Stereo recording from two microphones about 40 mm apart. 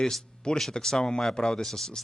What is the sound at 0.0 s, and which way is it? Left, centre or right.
Speech, centre.